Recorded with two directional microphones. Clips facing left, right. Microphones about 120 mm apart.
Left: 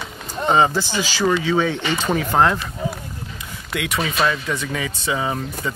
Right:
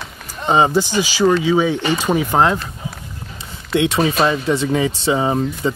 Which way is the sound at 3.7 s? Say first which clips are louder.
Right 8 dB; 25° right (ahead or behind).